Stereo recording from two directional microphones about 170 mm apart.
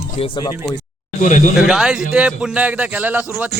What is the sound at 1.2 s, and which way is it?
Speech, 50° left (ahead or behind).